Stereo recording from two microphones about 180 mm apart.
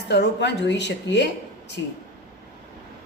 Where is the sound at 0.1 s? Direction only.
75° left (ahead or behind).